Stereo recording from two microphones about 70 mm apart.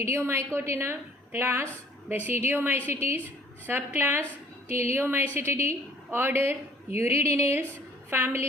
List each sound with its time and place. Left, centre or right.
0.0 s a woman's voice: right